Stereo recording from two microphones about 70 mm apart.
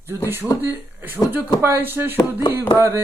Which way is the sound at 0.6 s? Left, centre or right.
Right.